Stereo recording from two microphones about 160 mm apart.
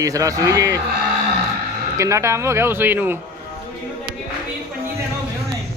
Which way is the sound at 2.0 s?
20° right (ahead or behind).